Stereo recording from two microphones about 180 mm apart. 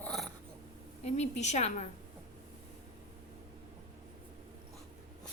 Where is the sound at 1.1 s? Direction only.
40° left (ahead or behind).